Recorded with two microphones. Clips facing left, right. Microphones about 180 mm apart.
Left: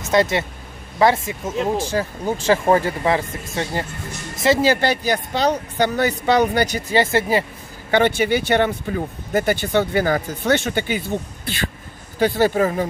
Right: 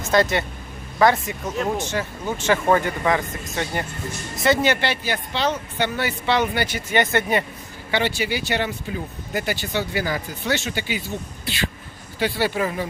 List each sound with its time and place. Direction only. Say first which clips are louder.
0.0 s speech: left 2 dB; 25° left (ahead or behind)
4.7 s speech: left 5 dB; 40° left (ahead or behind)
7.9 s speech: left 6 dB; 55° left (ahead or behind)